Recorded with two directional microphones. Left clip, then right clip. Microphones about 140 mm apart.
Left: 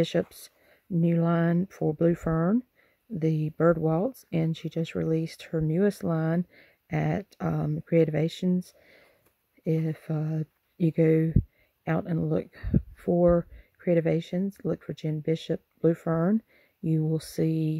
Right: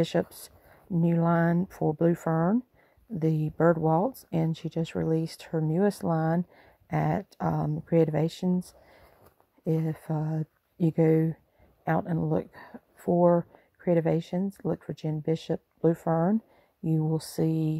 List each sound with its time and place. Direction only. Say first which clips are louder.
0.0 s speech: left 1 dB; 25° left (ahead or behind)